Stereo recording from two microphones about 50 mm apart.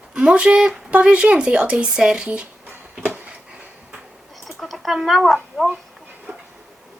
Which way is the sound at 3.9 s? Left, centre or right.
Centre.